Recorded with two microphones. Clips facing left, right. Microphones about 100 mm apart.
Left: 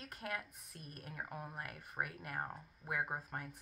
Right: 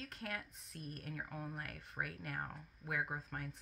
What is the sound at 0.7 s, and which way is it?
Speech, 50° right (ahead or behind).